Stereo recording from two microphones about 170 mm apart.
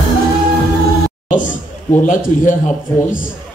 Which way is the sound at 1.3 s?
50° left (ahead or behind).